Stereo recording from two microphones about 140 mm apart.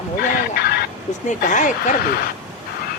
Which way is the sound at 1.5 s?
60° left (ahead or behind).